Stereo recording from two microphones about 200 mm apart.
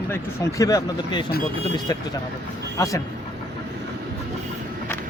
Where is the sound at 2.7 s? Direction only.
15° left (ahead or behind).